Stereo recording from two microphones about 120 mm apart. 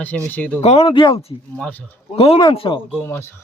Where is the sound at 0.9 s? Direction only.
45° left (ahead or behind).